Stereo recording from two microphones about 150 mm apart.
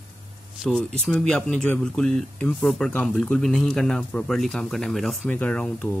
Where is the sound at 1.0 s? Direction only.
5° left (ahead or behind).